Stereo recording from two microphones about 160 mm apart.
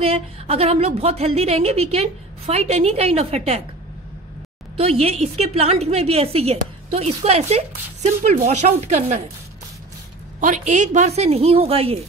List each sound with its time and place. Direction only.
0.0 s a woman's voice: 40° right (ahead or behind)
4.7 s a woman's voice: 40° right (ahead or behind)
10.4 s a woman's voice: 45° right (ahead or behind)